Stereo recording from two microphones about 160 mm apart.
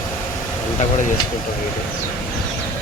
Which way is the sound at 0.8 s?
55° left (ahead or behind).